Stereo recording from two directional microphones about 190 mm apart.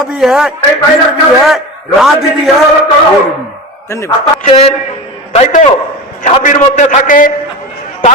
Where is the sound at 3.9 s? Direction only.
15° left (ahead or behind).